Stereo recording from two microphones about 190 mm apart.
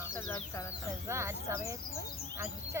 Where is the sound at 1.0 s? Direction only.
15° right (ahead or behind).